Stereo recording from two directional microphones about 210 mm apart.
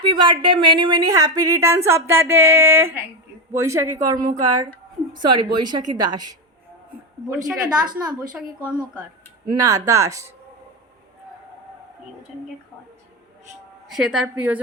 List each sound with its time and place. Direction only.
0.0 s a woman's voice: 25° right (ahead or behind)
7.3 s a woman's voice: 5° right (ahead or behind)
13.8 s a woman's voice: centre (ahead or behind)